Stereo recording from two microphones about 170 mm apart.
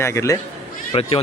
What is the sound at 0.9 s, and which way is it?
Speech, 30° left (ahead or behind).